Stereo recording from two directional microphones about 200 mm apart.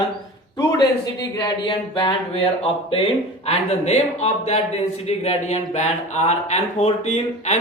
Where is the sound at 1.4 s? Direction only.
25° left (ahead or behind).